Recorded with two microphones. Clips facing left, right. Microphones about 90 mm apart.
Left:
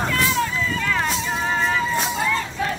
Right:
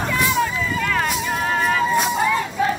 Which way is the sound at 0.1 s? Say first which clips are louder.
Right 2 dB; 15° right (ahead or behind).